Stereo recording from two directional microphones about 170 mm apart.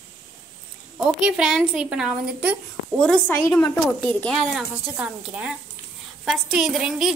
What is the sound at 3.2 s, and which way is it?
A child's voice, 15° left (ahead or behind).